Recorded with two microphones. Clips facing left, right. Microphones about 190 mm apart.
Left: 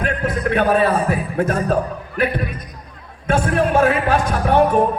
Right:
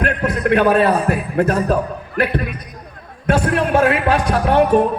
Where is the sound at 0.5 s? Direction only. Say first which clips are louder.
Right 3 dB; 65° right (ahead or behind).